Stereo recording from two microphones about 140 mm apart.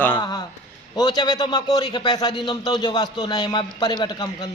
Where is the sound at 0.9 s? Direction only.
30° left (ahead or behind).